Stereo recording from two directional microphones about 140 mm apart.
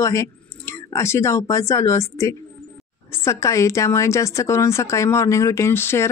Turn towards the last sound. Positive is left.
turn(degrees=20)  # may be behind; listen again after turning